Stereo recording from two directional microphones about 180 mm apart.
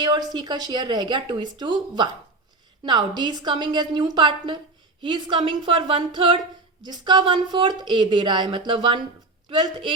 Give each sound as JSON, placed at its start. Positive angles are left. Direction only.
{"t": 0.0, "sound": "speech", "side_deg": -20}